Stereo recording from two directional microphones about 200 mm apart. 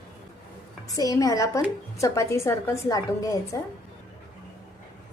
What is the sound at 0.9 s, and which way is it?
A woman's voice, 15° left (ahead or behind).